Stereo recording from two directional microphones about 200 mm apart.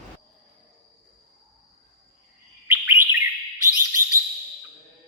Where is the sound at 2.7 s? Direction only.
10° right (ahead or behind).